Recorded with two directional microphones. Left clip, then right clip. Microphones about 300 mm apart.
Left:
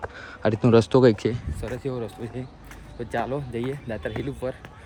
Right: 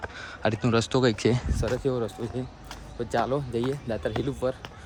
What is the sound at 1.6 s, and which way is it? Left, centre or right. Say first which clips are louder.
Speech: right 3 dB; centre.